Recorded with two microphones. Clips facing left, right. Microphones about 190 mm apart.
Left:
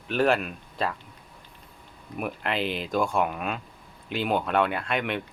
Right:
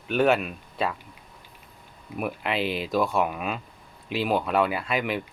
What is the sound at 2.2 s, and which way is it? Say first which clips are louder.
Speech: right 1 dB; centre (ahead or behind).